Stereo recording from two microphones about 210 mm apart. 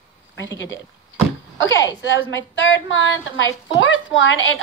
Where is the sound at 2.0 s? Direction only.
65° left (ahead or behind).